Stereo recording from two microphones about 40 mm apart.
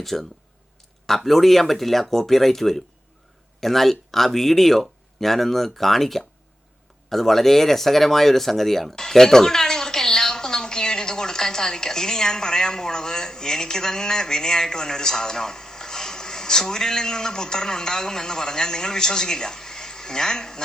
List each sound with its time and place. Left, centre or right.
0.0 s speech: centre